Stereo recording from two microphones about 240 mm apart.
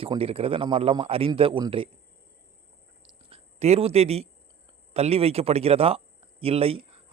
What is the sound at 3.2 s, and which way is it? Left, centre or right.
Speech, right.